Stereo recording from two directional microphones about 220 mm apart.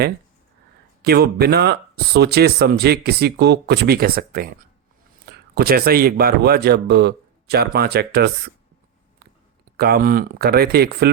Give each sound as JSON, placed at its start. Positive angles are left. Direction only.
{"t": 1.0, "sound": "speech", "side_deg": -45}
{"t": 9.7, "sound": "speech", "side_deg": -45}